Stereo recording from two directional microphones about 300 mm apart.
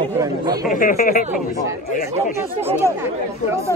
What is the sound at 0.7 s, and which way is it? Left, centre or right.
Speech, left.